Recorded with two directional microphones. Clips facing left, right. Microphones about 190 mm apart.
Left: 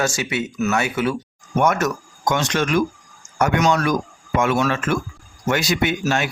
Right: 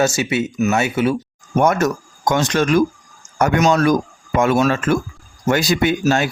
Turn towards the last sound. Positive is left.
turn(degrees=-35)  # may be behind; listen again after turning